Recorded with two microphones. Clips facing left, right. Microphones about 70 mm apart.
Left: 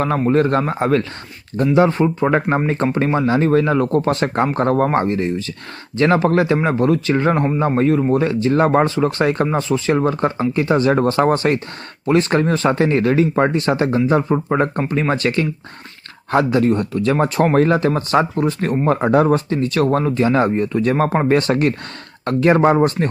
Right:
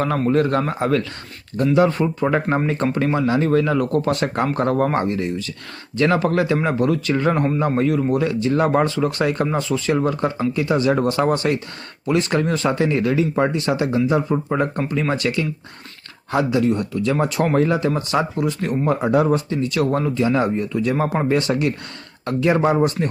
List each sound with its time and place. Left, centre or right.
0.0 s a man's voice: left